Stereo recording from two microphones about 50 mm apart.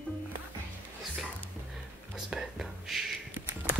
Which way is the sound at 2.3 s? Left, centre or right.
Centre.